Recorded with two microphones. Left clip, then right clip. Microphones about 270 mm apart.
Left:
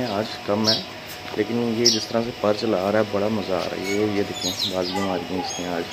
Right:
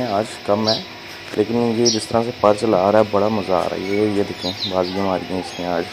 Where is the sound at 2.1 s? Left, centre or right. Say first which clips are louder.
Right 6 dB; centre.